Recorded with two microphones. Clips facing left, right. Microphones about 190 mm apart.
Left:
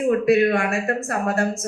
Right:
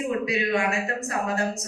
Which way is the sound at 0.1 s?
55° left (ahead or behind).